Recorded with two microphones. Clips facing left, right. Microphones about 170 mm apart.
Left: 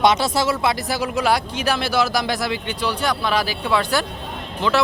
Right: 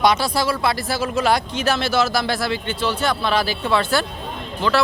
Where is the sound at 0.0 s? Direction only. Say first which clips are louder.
Left 1 dB; 20° left (ahead or behind).